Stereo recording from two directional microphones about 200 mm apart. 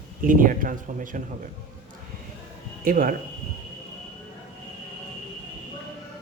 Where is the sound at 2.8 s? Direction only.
45° right (ahead or behind).